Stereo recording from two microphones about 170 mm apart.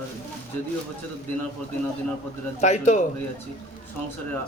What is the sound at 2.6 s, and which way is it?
Speech, 45° left (ahead or behind).